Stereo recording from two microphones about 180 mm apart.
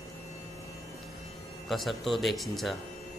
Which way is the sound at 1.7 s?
Centre (ahead or behind).